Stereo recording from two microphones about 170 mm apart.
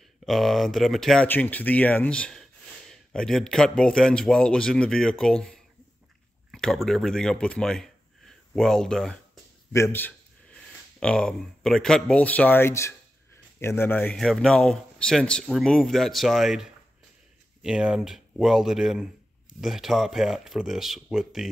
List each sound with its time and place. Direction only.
0.2 s a man's voice: centre (ahead or behind)
9.7 s a man's voice: 15° left (ahead or behind); by 21.5 s centre (ahead or behind)